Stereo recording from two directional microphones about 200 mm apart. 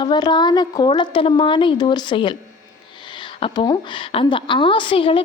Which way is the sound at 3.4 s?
25° left (ahead or behind).